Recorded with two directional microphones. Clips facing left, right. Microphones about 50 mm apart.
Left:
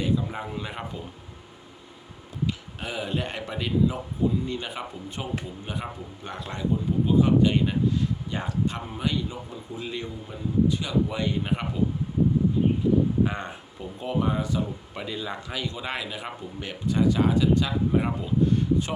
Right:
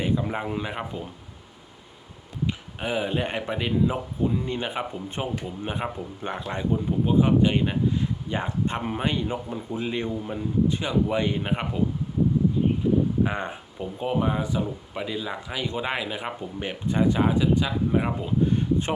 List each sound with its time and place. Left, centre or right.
0.0 s speech: right
2.5 s speech: right
8.8 s speech: right
13.2 s speech: centre
15.6 s speech: right